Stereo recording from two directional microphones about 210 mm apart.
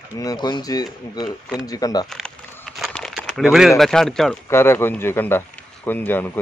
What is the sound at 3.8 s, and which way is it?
Speech, centre (ahead or behind).